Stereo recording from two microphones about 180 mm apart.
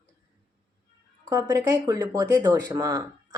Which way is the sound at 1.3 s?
20° right (ahead or behind).